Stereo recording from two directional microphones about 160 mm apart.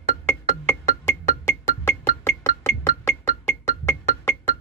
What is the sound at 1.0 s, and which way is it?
Music, 15° left (ahead or behind).